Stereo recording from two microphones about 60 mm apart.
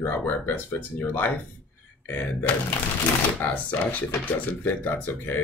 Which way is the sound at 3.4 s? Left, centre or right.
Left.